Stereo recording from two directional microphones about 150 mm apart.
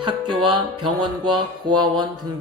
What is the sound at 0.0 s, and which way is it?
Music, 30° right (ahead or behind).